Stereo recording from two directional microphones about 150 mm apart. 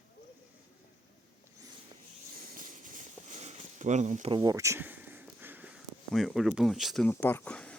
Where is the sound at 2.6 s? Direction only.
60° right (ahead or behind).